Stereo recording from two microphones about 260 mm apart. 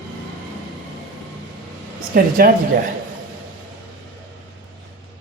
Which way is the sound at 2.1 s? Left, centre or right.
Right.